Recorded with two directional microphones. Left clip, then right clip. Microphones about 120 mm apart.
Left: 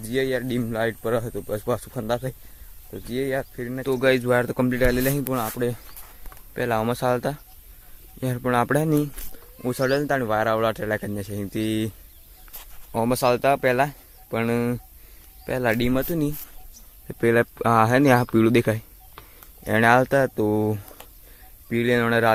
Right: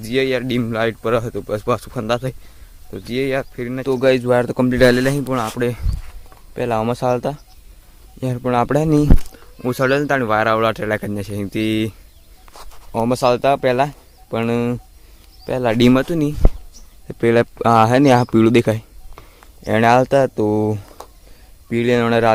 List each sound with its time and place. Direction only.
0.0 s speech: 5° right (ahead or behind)
6.5 s speech: centre (ahead or behind)